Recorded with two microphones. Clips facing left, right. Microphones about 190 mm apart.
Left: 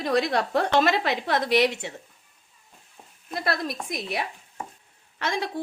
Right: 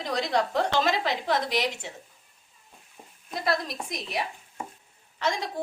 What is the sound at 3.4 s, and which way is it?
A woman's voice, 60° left (ahead or behind).